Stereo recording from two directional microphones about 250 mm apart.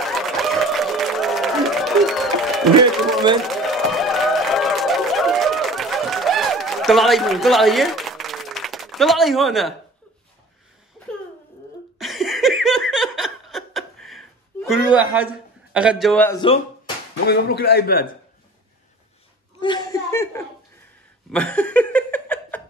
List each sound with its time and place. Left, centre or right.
0.0 s a sound: centre
12.0 s laughter: centre
15.7 s a man's voice: centre
17.3 s a man's voice: left
19.6 s chuckle: centre
21.3 s laughter: centre